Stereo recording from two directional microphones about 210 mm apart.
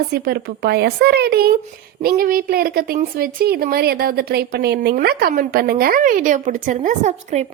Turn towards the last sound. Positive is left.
turn(degrees=-35)  # may be behind; listen again after turning